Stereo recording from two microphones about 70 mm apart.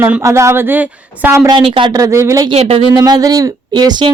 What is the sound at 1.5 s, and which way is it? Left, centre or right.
Speech, right.